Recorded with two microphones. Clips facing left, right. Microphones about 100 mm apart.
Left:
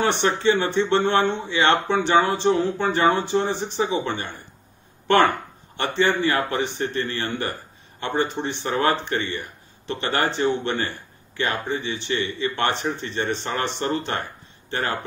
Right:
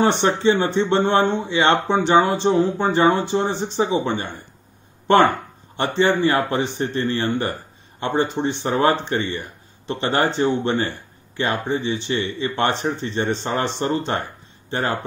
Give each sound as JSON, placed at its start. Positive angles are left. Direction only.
{"t": 0.0, "sound": "speech", "side_deg": -25}